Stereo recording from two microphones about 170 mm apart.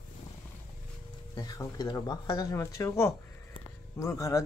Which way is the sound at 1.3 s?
20° left (ahead or behind).